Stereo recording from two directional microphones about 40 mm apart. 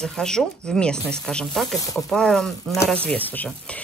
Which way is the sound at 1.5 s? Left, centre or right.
Centre.